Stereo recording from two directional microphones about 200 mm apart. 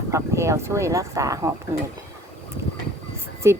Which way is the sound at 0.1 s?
15° right (ahead or behind).